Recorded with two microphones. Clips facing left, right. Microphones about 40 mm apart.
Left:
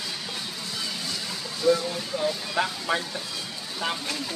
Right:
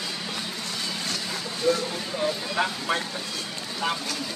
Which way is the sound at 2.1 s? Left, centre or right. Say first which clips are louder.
Right 1 dB; centre.